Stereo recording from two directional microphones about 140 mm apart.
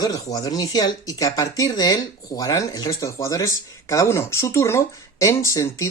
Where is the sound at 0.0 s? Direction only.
25° left (ahead or behind).